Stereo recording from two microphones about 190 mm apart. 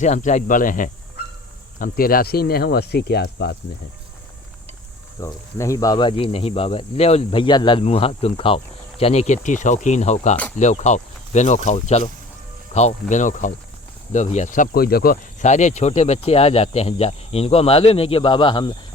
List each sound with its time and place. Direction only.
0.0 s speech: 40° left (ahead or behind); by 3.6 s 65° left (ahead or behind)
5.2 s speech: 15° left (ahead or behind)